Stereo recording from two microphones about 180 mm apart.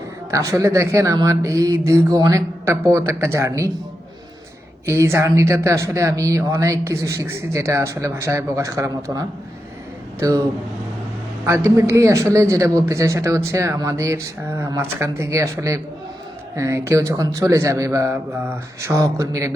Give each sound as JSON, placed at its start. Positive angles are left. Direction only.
{"t": 0.3, "sound": "speech", "side_deg": -15}
{"t": 4.9, "sound": "speech", "side_deg": -15}
{"t": 11.4, "sound": "speech", "side_deg": -15}